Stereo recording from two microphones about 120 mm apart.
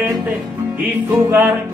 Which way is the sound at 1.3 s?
20° right (ahead or behind).